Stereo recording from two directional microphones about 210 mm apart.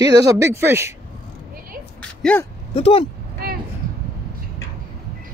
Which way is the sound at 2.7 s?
25° left (ahead or behind).